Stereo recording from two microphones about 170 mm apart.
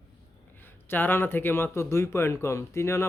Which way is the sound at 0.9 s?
10° left (ahead or behind).